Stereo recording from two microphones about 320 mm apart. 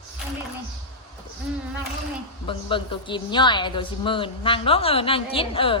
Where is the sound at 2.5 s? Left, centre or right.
Centre.